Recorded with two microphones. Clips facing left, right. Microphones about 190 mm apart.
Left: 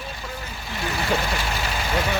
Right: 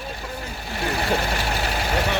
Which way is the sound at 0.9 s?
65° right (ahead or behind).